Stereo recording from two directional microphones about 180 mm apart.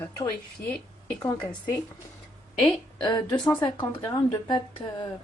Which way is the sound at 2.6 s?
25° left (ahead or behind).